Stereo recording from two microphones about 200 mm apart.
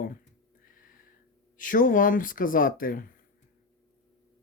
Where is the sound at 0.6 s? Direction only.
45° left (ahead or behind).